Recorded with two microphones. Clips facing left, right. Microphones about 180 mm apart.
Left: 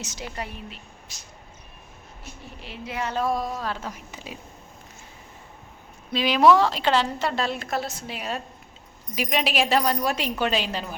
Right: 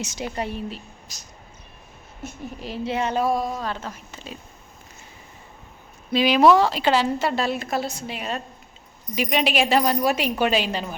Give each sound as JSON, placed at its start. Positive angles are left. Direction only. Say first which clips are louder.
{"t": 0.0, "sound": "a woman's voice", "louder": "right 6 dB", "side_deg": -20}
{"t": 2.2, "sound": "a woman's voice", "louder": "right 9 dB", "side_deg": -40}
{"t": 3.2, "sound": "a woman's voice", "louder": "right 3 dB", "side_deg": -5}
{"t": 6.1, "sound": "a woman's voice", "louder": "right 2 dB", "side_deg": 0}